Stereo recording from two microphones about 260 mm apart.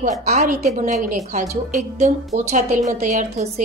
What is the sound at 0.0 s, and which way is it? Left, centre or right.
A woman's voice, right.